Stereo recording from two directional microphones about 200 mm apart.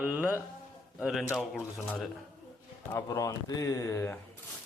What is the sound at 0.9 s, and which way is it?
A man's voice, centre (ahead or behind).